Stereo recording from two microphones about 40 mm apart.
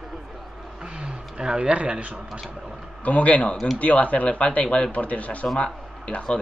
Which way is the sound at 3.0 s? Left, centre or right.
Left.